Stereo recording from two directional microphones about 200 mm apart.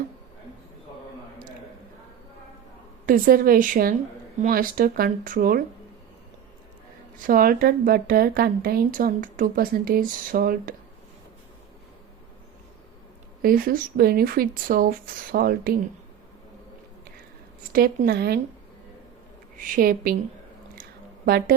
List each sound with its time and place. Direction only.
3.1 s a woman's voice: 45° right (ahead or behind)
7.2 s a woman's voice: 45° right (ahead or behind)
13.4 s a woman's voice: 45° right (ahead or behind)
17.7 s a woman's voice: 45° right (ahead or behind)
19.5 s a woman's voice: 45° right (ahead or behind)
21.2 s a woman's voice: 50° right (ahead or behind)